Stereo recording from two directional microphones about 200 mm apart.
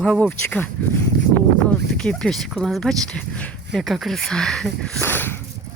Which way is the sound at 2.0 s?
5° left (ahead or behind).